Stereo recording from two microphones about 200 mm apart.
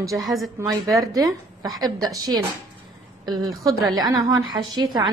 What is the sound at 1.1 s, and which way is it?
A woman's voice, 15° right (ahead or behind).